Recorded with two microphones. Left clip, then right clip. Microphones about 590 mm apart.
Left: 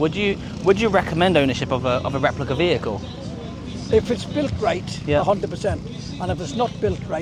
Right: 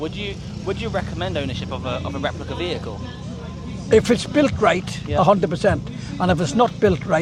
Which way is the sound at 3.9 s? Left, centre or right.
Right.